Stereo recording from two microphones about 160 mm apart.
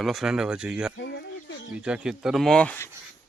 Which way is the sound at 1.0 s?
90° left.